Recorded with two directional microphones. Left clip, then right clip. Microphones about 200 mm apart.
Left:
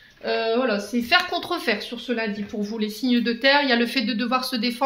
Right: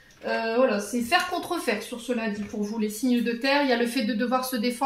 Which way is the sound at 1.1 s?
40° left (ahead or behind).